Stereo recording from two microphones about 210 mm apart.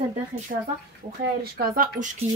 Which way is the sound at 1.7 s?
40° right (ahead or behind).